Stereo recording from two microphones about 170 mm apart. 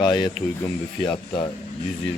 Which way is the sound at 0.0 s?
25° left (ahead or behind).